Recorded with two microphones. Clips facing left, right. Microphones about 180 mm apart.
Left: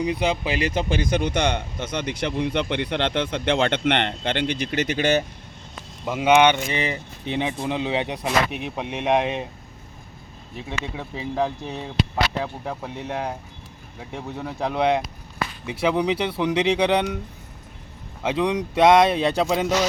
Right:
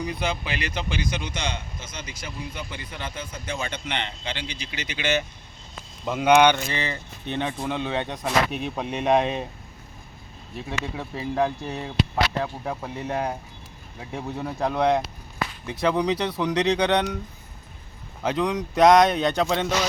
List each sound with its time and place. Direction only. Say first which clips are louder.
0.0 s speech: left 5 dB; 15° left (ahead or behind)
0.7 s speech: left 6 dB; 45° left (ahead or behind)
6.1 s speech: left 1 dB; 5° left (ahead or behind)
11.1 s speech: right 1 dB; centre (ahead or behind)
14.6 s speech: even; 5° left (ahead or behind)
18.2 s speech: left 2 dB; 5° left (ahead or behind)